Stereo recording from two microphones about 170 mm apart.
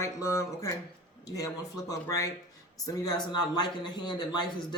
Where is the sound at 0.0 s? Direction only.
15° left (ahead or behind).